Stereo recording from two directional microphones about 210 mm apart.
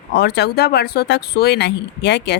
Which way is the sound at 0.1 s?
50° left (ahead or behind).